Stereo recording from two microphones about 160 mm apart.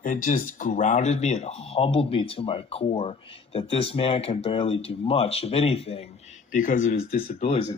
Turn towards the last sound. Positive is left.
turn(degrees=40)  # may be behind; listen again after turning